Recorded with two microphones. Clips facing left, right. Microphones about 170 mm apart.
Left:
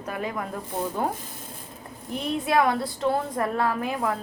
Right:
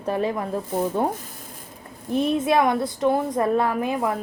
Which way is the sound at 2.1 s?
20° right (ahead or behind).